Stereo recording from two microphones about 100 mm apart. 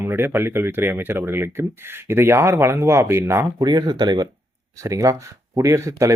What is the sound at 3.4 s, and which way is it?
Speech, 40° right (ahead or behind).